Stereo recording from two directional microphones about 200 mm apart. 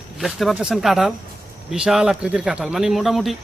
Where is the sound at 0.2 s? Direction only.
Centre (ahead or behind).